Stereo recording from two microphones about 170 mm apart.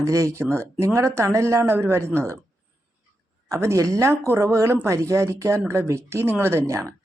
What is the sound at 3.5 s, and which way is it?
Speech, 15° right (ahead or behind).